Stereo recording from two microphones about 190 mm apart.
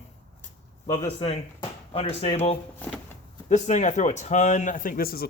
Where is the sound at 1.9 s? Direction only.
30° left (ahead or behind).